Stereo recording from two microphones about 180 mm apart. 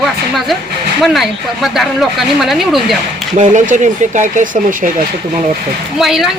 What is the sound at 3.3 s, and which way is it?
Speech, 45° right (ahead or behind).